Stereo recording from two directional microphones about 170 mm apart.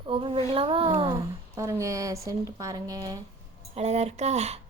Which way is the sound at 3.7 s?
40° right (ahead or behind).